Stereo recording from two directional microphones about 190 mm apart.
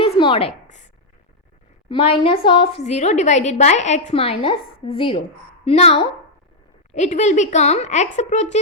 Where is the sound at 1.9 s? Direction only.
30° left (ahead or behind).